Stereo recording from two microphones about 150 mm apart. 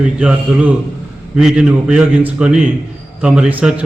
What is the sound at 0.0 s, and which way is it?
A man's voice, 5° right (ahead or behind).